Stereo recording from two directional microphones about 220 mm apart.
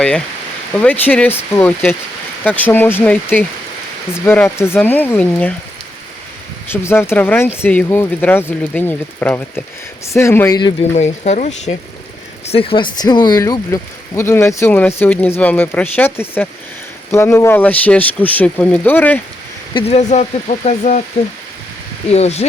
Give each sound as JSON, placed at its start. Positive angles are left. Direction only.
{"t": 0.7, "sound": "speech", "side_deg": 5}
{"t": 6.7, "sound": "speech", "side_deg": 10}
{"t": 10.9, "sound": "speech", "side_deg": 30}
{"t": 19.7, "sound": "speech", "side_deg": 30}
{"t": 22.1, "sound": "speech", "side_deg": 30}